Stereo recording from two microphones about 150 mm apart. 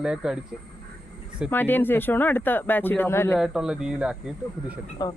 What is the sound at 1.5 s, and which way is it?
Speech, 15° left (ahead or behind).